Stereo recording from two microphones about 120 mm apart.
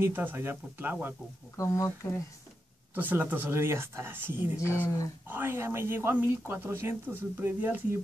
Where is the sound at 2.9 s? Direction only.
15° right (ahead or behind).